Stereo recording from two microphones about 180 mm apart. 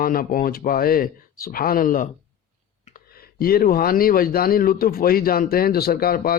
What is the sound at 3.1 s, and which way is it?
A man's voice, 55° left (ahead or behind).